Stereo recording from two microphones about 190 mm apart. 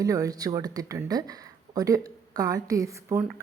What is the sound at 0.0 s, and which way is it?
A woman's voice, 20° right (ahead or behind).